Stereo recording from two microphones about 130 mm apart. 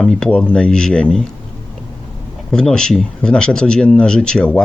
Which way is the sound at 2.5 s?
5° left (ahead or behind).